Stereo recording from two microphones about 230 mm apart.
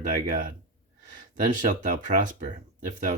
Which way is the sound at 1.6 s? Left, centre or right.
Right.